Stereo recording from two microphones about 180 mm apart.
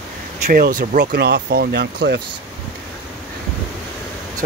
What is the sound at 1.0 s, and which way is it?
Speech, 65° right (ahead or behind).